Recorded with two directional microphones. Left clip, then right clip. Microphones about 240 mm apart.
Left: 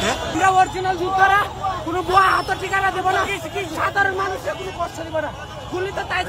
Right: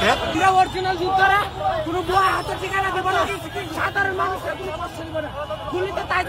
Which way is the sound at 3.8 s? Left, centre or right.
Centre.